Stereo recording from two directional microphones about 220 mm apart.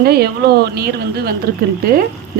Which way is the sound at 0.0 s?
45° right (ahead or behind).